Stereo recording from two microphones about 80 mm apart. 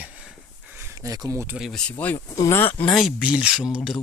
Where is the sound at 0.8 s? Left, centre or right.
Right.